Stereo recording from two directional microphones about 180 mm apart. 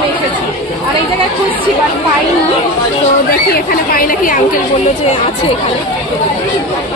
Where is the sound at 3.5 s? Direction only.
55° left (ahead or behind).